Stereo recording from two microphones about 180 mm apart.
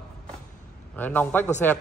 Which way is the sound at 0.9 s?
10° left (ahead or behind).